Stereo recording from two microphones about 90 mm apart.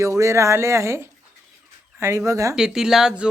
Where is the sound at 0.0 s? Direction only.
35° right (ahead or behind).